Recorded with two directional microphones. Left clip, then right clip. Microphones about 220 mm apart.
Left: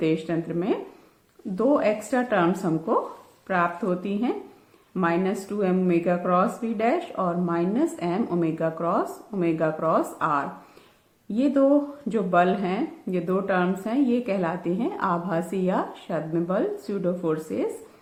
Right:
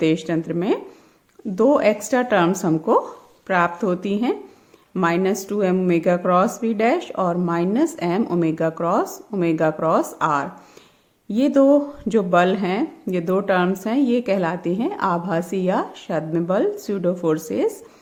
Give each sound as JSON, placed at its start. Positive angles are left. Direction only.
{"t": 0.0, "sound": "speech", "side_deg": -40}